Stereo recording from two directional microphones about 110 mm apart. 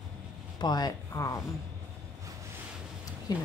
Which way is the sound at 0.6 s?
40° left (ahead or behind).